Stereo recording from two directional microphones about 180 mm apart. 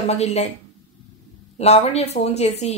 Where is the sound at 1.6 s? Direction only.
35° left (ahead or behind).